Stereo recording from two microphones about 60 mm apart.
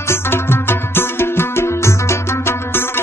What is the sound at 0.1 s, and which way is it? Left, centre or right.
Music, left.